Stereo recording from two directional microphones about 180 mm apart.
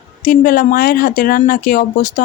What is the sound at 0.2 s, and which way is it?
Speech, 50° left (ahead or behind).